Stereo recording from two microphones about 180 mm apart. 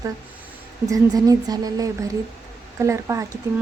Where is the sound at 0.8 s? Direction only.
20° right (ahead or behind).